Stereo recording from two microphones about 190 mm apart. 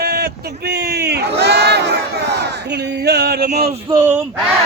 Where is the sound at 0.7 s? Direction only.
55° right (ahead or behind).